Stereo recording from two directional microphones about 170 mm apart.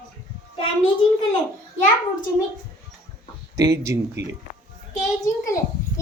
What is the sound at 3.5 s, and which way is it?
Speech, 20° right (ahead or behind).